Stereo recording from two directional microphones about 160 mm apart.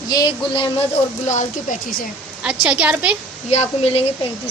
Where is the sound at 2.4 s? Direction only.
5° right (ahead or behind).